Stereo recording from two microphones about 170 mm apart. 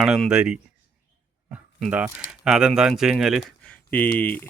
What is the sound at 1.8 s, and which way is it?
Speech, 5° right (ahead or behind).